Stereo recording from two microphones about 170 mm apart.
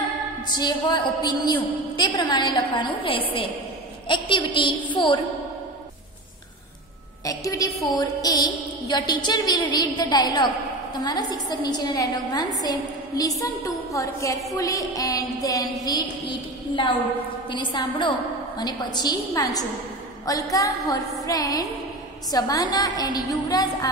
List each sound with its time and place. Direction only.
0.5 s a woman's voice: 25° left (ahead or behind)
7.2 s a woman's voice: 20° left (ahead or behind)